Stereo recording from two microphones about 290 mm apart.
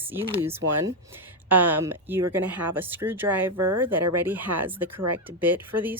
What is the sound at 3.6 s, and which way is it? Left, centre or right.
Speech, right.